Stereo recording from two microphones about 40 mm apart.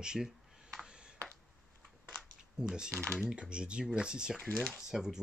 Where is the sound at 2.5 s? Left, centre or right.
Right.